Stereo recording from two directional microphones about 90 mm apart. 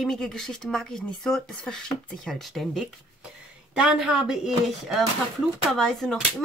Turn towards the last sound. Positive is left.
turn(degrees=5)  # may be behind; listen again after turning